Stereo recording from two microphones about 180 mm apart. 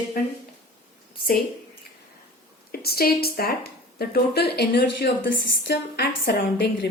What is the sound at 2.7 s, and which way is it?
A woman's voice, 60° left (ahead or behind).